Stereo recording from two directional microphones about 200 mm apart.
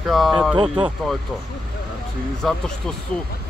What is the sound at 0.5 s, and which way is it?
Speech, 25° right (ahead or behind).